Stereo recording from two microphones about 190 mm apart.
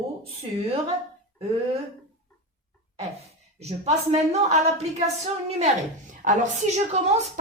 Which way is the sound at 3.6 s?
35° right (ahead or behind).